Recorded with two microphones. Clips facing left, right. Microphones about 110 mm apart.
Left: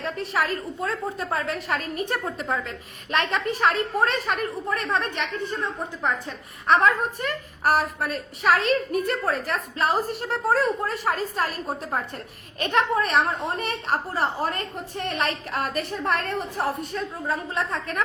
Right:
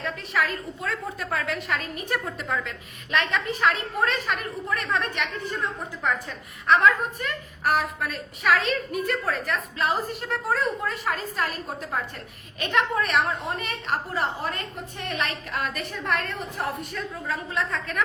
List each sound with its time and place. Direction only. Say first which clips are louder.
0.0 s a woman's voice: left 1 dB; 35° left (ahead or behind)
6.7 s a woman's voice: even; 35° left (ahead or behind)